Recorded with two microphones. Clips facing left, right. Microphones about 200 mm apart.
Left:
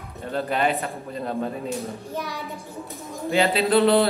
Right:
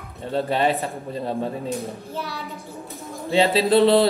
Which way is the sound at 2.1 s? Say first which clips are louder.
Left 1 dB; 15° left (ahead or behind).